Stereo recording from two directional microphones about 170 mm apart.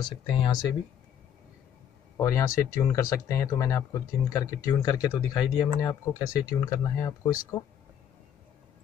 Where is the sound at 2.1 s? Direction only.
20° left (ahead or behind).